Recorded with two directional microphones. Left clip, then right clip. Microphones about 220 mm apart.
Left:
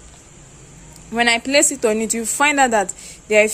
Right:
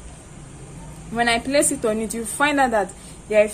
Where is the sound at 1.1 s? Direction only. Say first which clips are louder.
Left 3 dB; 40° left (ahead or behind).